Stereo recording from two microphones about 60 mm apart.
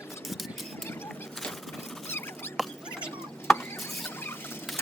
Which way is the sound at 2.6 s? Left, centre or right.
Centre.